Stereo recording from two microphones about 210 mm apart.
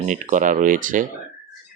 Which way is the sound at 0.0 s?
35° right (ahead or behind).